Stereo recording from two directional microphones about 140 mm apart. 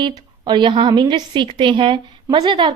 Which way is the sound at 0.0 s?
30° right (ahead or behind).